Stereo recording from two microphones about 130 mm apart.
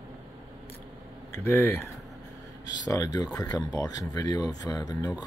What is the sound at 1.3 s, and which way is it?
Speech, 20° left (ahead or behind).